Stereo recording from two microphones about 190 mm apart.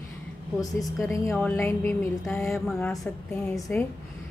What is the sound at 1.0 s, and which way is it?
A woman's voice, 15° left (ahead or behind).